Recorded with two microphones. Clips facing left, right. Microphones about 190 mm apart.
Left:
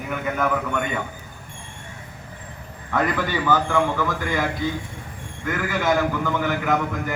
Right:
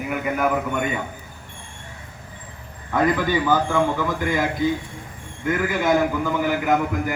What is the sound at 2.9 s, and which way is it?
A man's voice, 15° right (ahead or behind).